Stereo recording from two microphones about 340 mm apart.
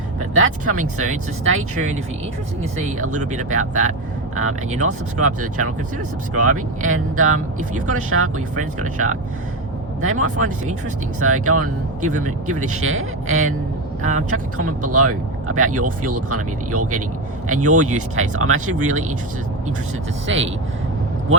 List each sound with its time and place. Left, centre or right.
0.3 s speech: right
3.0 s speech: right
6.3 s speech: right
14.0 s speech: right
14.3 s speech: right
20.2 s speech: right